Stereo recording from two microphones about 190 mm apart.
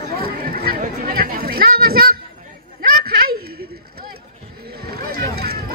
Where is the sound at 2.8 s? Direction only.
50° right (ahead or behind).